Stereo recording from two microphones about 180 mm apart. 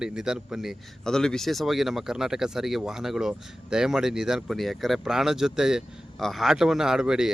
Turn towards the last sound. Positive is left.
turn(degrees=-5)  # may be behind; listen again after turning